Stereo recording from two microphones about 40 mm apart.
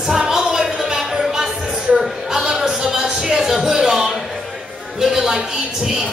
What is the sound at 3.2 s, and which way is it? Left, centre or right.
Music, centre.